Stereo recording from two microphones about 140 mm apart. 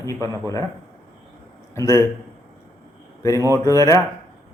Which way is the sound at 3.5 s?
20° left (ahead or behind).